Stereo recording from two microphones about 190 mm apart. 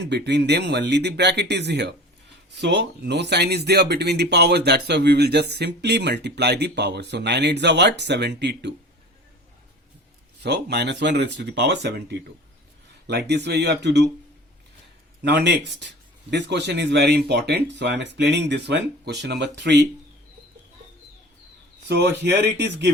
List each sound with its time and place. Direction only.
0.0 s speech: 65° right (ahead or behind)
10.4 s speech: 60° right (ahead or behind)
15.2 s speech: 65° right (ahead or behind)
21.8 s speech: 65° right (ahead or behind)